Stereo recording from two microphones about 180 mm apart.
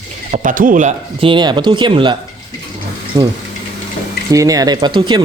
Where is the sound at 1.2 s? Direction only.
25° right (ahead or behind).